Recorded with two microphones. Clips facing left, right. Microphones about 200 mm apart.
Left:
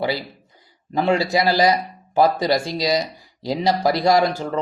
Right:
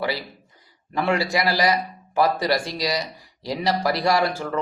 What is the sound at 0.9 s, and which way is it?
Speech, 25° left (ahead or behind).